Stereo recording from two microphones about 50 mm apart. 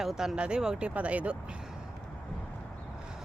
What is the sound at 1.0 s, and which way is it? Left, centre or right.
Speech, right.